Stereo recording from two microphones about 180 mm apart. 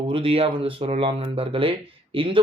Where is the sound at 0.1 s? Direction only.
30° right (ahead or behind).